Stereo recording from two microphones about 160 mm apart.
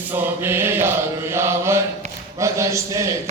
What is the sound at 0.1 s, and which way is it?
Mantra, 15° right (ahead or behind).